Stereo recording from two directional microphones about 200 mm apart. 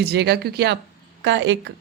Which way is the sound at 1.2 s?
65° right (ahead or behind).